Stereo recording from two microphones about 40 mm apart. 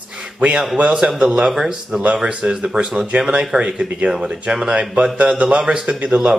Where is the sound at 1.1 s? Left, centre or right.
Centre.